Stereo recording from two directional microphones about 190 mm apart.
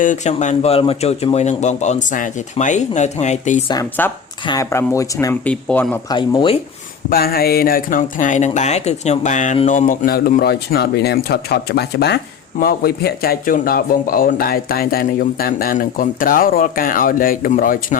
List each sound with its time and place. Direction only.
0.0 s a man's voice: 40° left (ahead or behind)
4.0 s speech: 10° left (ahead or behind)
5.5 s speech: 5° left (ahead or behind)
6.1 s speech: 25° left (ahead or behind)
7.1 s speech: 50° left (ahead or behind)